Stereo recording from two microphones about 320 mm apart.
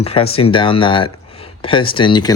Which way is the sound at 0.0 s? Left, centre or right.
Centre.